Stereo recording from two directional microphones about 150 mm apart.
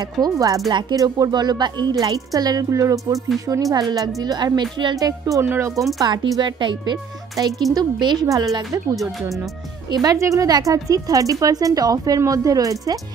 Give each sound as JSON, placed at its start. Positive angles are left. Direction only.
{"t": 0.2, "sound": "speech", "side_deg": -25}
{"t": 9.8, "sound": "speech", "side_deg": -25}